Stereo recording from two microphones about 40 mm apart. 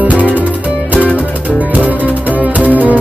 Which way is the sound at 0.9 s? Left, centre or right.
Left.